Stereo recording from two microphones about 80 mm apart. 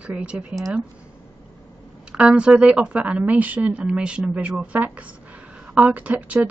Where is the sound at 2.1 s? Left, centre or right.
Centre.